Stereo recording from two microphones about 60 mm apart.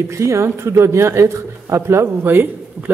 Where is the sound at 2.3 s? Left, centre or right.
Right.